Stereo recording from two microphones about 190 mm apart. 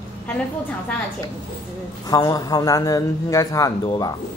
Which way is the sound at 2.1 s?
20° left (ahead or behind).